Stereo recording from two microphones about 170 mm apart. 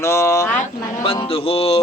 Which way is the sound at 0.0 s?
15° left (ahead or behind).